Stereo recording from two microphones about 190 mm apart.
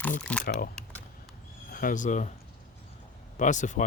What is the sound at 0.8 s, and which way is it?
Typing, 5° left (ahead or behind).